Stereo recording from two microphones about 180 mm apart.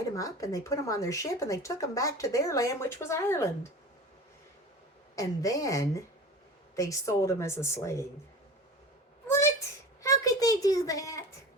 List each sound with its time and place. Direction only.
0.1 s speech: 20° left (ahead or behind)
5.1 s a woman's voice: 20° left (ahead or behind)
10.0 s a sound: 20° left (ahead or behind)